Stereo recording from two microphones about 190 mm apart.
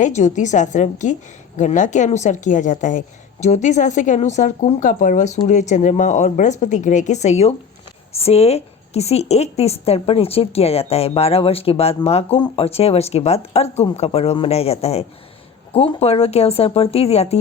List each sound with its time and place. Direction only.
0.0 s a woman's voice: 35° left (ahead or behind)